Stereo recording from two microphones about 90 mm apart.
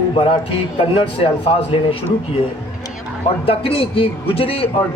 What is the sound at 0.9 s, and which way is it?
A man's voice, 90° left.